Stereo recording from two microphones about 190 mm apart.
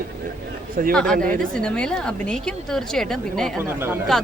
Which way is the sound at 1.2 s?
45° right (ahead or behind).